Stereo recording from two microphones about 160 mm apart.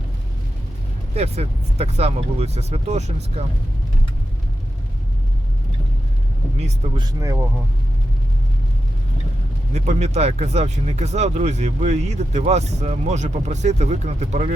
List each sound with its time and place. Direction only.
1.1 s speech: 40° right (ahead or behind)
6.6 s speech: 40° right (ahead or behind); by 7.4 s 20° right (ahead or behind)
9.7 s speech: 45° right (ahead or behind)